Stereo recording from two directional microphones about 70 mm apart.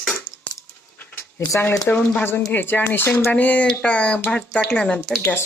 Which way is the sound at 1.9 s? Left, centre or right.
Centre.